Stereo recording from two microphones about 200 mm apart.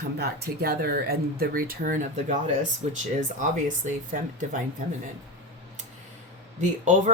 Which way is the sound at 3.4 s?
40° right (ahead or behind).